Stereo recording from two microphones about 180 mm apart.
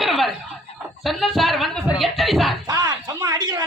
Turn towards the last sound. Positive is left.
turn(degrees=-20)  # may be behind; listen again after turning